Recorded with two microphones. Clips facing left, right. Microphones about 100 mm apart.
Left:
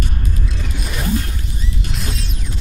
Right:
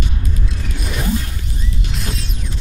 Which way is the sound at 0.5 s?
Centre (ahead or behind).